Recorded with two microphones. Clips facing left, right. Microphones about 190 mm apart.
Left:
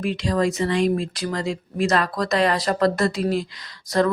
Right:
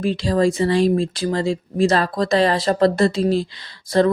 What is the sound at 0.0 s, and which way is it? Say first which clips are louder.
Speech: right 4 dB; 30° right (ahead or behind).